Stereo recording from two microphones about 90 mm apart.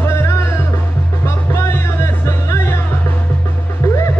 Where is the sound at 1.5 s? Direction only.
30° left (ahead or behind).